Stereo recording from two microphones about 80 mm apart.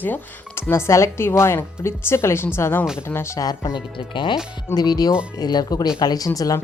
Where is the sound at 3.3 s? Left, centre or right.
Left.